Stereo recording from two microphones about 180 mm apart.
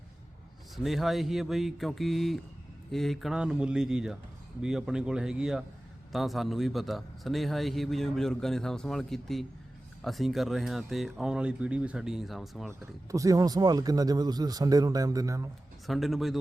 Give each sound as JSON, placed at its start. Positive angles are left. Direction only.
{"t": 0.8, "sound": "a man's voice", "side_deg": 0}
{"t": 13.1, "sound": "speech", "side_deg": -20}
{"t": 15.9, "sound": "a man's voice", "side_deg": 0}